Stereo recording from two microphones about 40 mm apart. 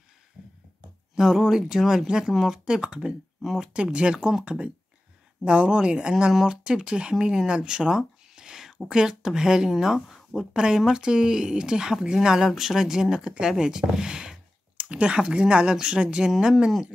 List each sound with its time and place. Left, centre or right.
1.1 s speech: centre
2.3 s speech: centre
2.6 s speech: centre
3.7 s speech: right
5.4 s speech: right
9.7 s speech: centre
10.5 s speech: centre
14.8 s speech: right